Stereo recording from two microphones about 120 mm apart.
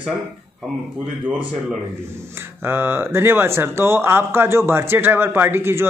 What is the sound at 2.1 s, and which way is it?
Speech, 20° right (ahead or behind).